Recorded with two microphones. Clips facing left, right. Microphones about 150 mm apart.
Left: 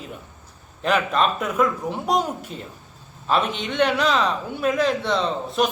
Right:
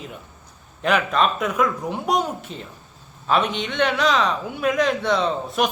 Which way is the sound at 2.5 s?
45° left (ahead or behind).